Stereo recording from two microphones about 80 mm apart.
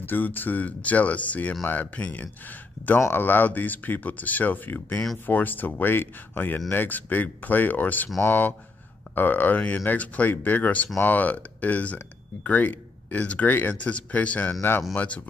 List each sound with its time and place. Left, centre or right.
0.0 s speech: left